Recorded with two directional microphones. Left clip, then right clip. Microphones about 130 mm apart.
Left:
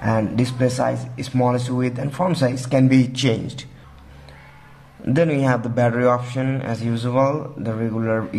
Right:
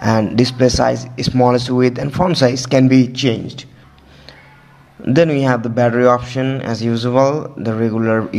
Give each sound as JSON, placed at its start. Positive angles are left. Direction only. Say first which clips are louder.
{"t": 0.0, "sound": "speech", "louder": "right 6 dB", "side_deg": -40}
{"t": 3.1, "sound": "a man's voice", "louder": "right 3 dB", "side_deg": -10}
{"t": 5.0, "sound": "a man's voice", "louder": "right 5 dB", "side_deg": -30}